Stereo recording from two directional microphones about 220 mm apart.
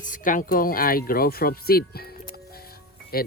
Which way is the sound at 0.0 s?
35° left (ahead or behind).